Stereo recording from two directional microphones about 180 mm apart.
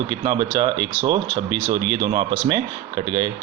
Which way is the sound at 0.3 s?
25° right (ahead or behind).